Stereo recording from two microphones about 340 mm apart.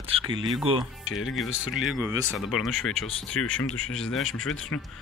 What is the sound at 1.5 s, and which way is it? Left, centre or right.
Speech, left.